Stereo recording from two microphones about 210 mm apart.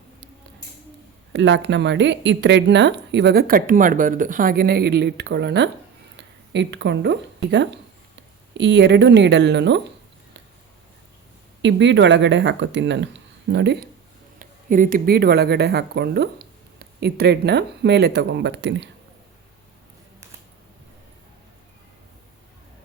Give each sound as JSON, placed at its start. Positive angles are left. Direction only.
{"t": 1.3, "sound": "speech", "side_deg": -60}
{"t": 11.6, "sound": "speech", "side_deg": -60}
{"t": 14.3, "sound": "speech", "side_deg": -40}